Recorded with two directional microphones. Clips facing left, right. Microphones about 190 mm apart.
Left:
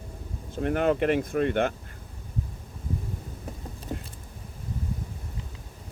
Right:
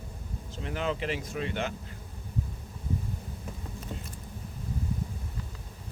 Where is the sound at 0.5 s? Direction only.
55° left (ahead or behind).